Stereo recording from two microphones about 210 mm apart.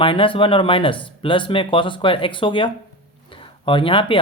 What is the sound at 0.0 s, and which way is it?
Speech, 25° left (ahead or behind).